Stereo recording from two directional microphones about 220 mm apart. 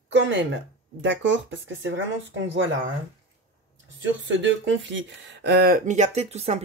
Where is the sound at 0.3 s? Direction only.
55° right (ahead or behind).